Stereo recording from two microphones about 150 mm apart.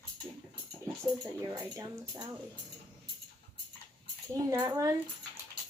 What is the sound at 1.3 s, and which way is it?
Speech, 20° right (ahead or behind).